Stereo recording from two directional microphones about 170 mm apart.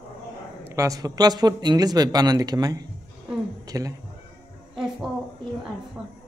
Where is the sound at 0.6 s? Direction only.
20° right (ahead or behind).